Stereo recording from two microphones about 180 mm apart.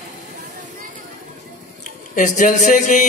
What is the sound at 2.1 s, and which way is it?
Speech, 45° left (ahead or behind).